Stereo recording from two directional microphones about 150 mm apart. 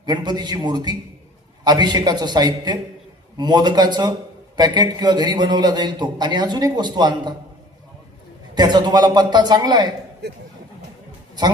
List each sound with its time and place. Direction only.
0.0 s a man's voice: 25° right (ahead or behind)
8.5 s a man's voice: 25° right (ahead or behind)